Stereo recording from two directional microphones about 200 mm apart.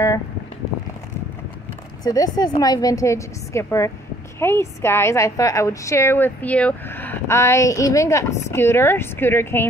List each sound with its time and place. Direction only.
2.0 s a woman's voice: 20° left (ahead or behind)